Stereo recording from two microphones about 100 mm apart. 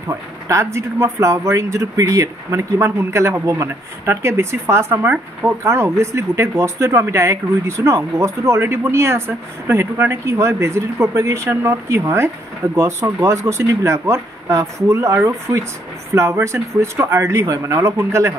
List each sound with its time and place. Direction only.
0.1 s speech: 30° right (ahead or behind)